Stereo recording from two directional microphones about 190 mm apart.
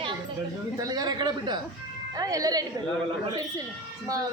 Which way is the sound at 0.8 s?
20° right (ahead or behind).